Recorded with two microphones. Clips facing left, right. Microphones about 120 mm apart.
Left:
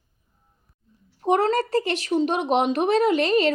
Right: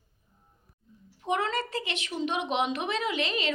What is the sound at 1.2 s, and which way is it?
Speech, 40° left (ahead or behind).